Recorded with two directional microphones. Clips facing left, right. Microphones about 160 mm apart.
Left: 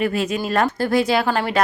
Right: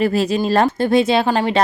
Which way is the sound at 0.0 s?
35° right (ahead or behind).